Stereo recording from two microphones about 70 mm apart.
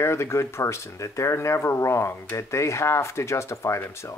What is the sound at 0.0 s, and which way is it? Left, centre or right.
Speech, left.